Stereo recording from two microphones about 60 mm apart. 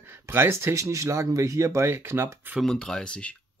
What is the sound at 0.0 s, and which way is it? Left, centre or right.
Speech, right.